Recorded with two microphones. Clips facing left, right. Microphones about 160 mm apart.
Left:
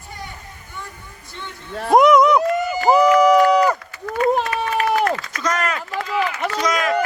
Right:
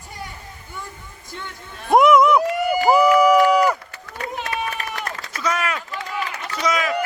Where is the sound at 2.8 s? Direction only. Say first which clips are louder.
Left 1 dB; 10° right (ahead or behind).